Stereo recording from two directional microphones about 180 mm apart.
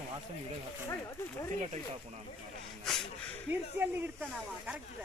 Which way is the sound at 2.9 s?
Centre (ahead or behind).